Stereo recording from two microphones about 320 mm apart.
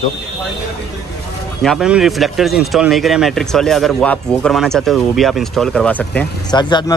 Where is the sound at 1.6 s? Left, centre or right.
Centre.